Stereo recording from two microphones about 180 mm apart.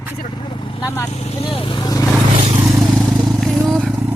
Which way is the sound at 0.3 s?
25° left (ahead or behind).